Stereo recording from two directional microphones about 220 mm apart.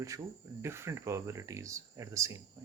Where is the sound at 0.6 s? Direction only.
10° right (ahead or behind).